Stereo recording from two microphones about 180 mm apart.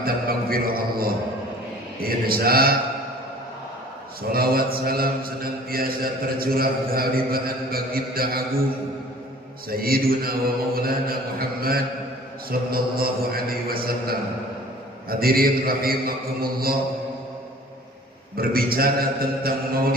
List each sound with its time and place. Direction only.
0.0 s a sound: 55° right (ahead or behind)
2.0 s mantra: 55° right (ahead or behind)
4.2 s a man's voice: 55° right (ahead or behind)
9.6 s a man's voice: 55° right (ahead or behind)
18.3 s a man's voice: 55° right (ahead or behind)